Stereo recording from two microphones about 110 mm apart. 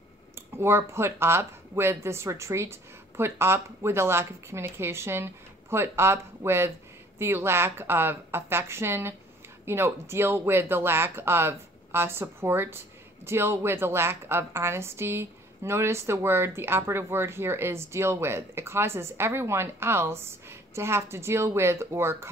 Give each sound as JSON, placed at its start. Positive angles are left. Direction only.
{"t": 0.6, "sound": "speech", "side_deg": -25}